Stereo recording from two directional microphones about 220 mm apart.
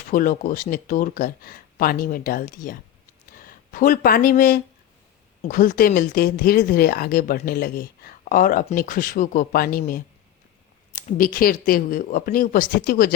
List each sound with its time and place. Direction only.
0.1 s speech: 40° left (ahead or behind)